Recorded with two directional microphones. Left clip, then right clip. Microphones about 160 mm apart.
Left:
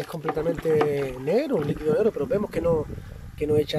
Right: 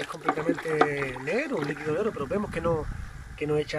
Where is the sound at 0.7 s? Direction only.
30° left (ahead or behind).